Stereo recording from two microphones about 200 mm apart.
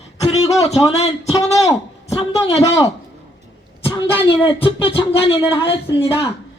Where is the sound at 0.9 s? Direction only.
30° left (ahead or behind).